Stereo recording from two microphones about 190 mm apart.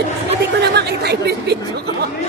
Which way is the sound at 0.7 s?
60° right (ahead or behind).